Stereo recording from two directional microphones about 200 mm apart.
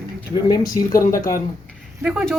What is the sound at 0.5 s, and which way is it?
Speech, 15° left (ahead or behind).